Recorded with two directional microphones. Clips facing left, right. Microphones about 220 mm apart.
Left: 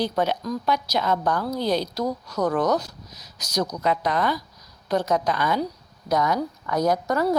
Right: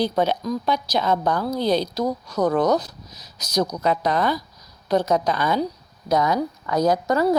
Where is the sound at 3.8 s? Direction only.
35° right (ahead or behind).